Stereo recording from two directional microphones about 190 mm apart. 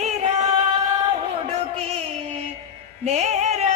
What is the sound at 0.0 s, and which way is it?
Music, 35° right (ahead or behind).